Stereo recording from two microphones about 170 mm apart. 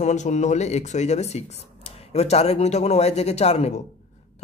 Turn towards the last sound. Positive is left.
turn(degrees=40)  # may be behind; listen again after turning